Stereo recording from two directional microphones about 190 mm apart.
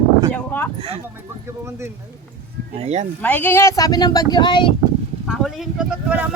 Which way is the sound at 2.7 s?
35° right (ahead or behind).